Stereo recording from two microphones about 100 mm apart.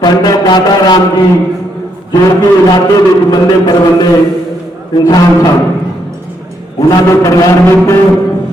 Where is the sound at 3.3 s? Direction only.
45° left (ahead or behind).